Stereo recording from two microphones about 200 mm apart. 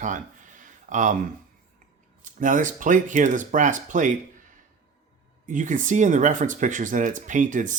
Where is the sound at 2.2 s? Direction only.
40° right (ahead or behind).